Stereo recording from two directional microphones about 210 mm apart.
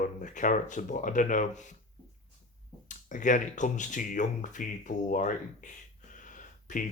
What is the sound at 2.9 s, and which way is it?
Speech, 40° left (ahead or behind).